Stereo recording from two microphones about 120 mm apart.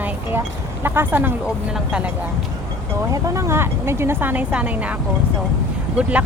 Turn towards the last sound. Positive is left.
turn(degrees=-10)  # may be behind; listen again after turning